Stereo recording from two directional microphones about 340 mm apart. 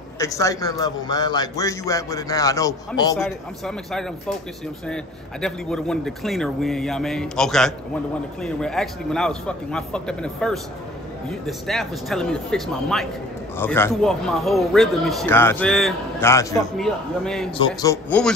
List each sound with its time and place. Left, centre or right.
0.2 s a man's voice: centre